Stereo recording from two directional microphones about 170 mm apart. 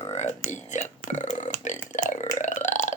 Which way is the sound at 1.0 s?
45° left (ahead or behind).